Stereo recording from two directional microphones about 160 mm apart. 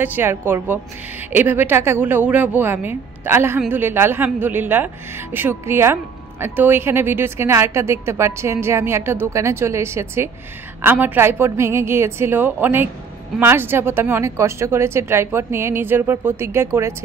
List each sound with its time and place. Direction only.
0.0 s speech: 10° right (ahead or behind)